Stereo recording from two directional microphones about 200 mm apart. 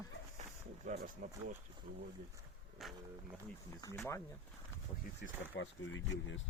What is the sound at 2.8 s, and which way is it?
Speech, centre (ahead or behind).